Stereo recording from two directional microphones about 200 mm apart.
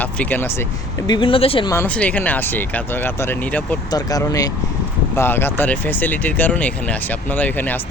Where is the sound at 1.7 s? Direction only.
10° left (ahead or behind).